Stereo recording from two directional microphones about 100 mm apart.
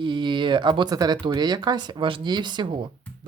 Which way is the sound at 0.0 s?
55° right (ahead or behind).